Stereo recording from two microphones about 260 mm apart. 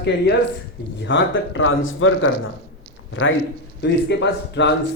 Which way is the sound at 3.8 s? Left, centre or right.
Left.